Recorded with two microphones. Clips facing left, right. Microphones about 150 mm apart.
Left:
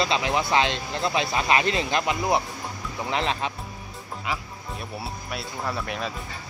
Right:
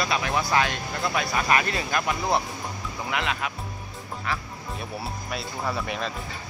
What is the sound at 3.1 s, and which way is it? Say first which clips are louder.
Speech: left 2 dB; 30° left (ahead or behind).